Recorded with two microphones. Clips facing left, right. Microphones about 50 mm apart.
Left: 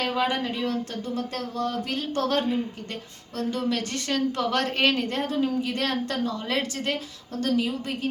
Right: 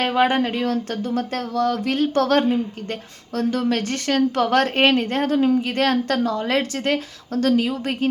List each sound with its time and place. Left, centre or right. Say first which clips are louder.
0.0 s speech: right 7 dB; right
5.3 s speech: right 7 dB; right
7.4 s speech: right 5 dB; right